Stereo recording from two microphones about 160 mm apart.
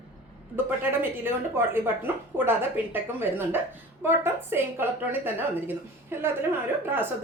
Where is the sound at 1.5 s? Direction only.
15° right (ahead or behind).